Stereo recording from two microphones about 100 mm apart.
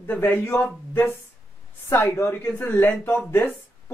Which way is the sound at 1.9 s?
25° left (ahead or behind).